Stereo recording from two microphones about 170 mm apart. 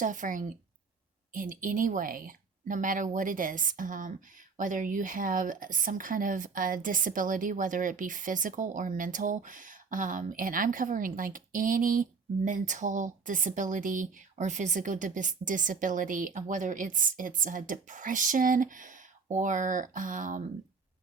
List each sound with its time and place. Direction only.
0.0 s speech: 50° right (ahead or behind)